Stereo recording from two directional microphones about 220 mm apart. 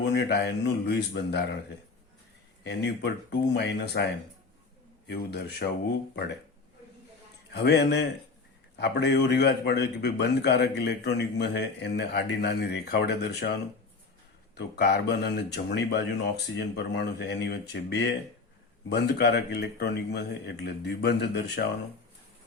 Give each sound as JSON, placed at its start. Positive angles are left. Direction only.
{"t": 0.0, "sound": "a man's voice", "side_deg": 50}
{"t": 2.6, "sound": "a man's voice", "side_deg": 50}
{"t": 7.5, "sound": "a man's voice", "side_deg": 50}